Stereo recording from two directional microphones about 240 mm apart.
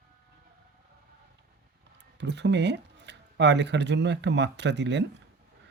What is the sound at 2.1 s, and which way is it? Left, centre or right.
Speech, right.